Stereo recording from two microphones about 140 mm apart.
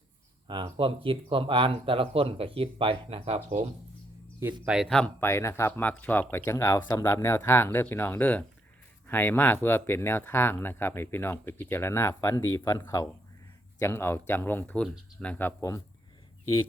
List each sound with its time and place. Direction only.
0.4 s speech: 35° right (ahead or behind); by 3.7 s 50° right (ahead or behind)
4.6 s speech: 5° right (ahead or behind)
5.2 s speech: 20° left (ahead or behind)